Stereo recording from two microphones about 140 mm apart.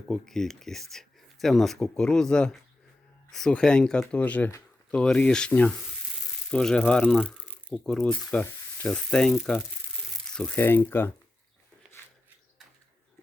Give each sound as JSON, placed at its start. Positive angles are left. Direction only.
{"t": 0.1, "sound": "speech", "side_deg": 5}
{"t": 10.6, "sound": "speech", "side_deg": 15}